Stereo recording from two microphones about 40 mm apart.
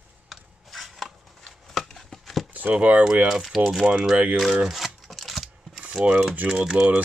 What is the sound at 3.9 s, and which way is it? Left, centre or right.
Speech, right.